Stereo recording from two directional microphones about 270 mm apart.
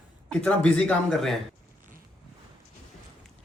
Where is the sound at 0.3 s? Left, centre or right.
Centre.